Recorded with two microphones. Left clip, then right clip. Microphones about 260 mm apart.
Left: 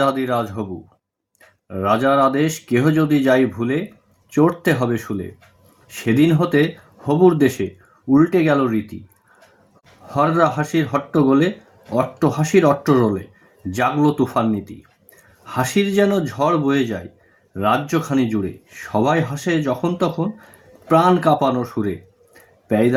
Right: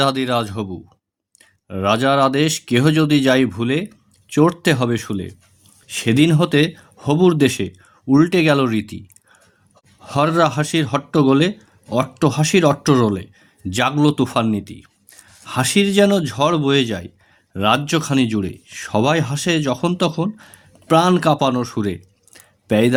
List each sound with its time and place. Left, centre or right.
0.0 s speech: right
10.2 s speech: right